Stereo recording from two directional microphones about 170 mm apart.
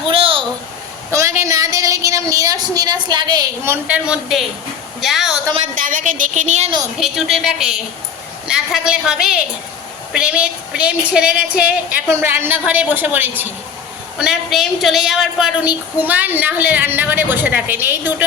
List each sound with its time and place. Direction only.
0.1 s a sound: 30° right (ahead or behind)
1.1 s a woman's voice: 15° right (ahead or behind)
3.8 s a woman's voice: 5° right (ahead or behind)
5.8 s a woman's voice: 50° right (ahead or behind)
7.0 s a woman's voice: centre (ahead or behind)